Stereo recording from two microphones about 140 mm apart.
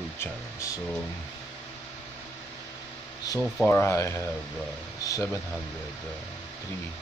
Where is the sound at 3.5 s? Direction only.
10° left (ahead or behind).